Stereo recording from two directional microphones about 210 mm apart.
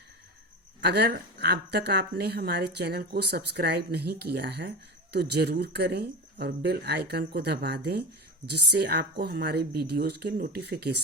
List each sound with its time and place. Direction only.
0.8 s speech: 50° right (ahead or behind)